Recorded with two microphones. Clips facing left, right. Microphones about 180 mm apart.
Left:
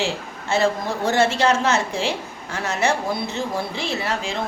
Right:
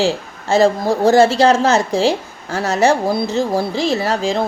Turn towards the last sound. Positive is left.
turn(degrees=-35)  # may be behind; listen again after turning